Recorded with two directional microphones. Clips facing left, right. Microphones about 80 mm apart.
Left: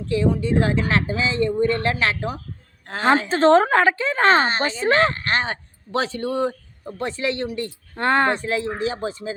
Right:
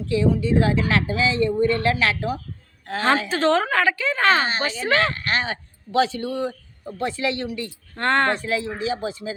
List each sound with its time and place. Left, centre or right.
0.1 s a woman's voice: left
7.9 s speech: centre
8.4 s a woman's voice: left